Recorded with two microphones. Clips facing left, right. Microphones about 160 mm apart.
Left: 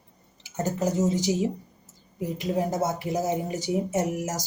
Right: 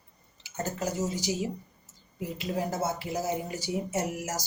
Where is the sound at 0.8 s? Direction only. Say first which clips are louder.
Left 8 dB; 20° left (ahead or behind).